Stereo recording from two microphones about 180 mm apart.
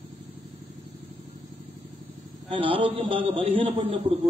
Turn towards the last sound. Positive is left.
turn(degrees=-35)  # may be behind; listen again after turning